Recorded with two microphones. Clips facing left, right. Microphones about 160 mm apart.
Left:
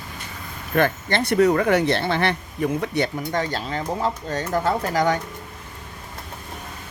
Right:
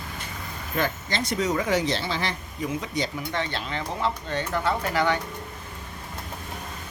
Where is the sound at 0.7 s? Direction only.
60° left (ahead or behind).